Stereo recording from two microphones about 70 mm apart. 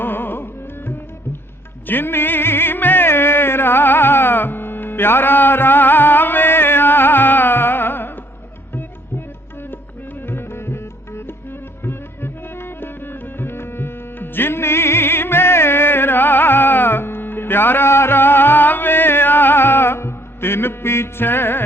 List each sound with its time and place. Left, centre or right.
0.0 s music: left